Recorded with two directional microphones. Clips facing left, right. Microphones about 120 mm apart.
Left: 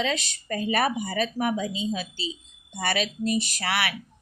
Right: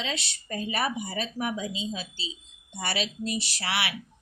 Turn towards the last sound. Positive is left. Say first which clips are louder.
# left 3 dB
turn(degrees=50)  # may be behind; listen again after turning